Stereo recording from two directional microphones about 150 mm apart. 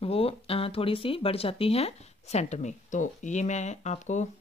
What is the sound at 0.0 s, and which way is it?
Speech, 40° left (ahead or behind).